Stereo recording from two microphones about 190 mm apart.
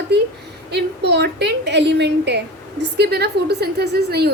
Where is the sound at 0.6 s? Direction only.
60° right (ahead or behind).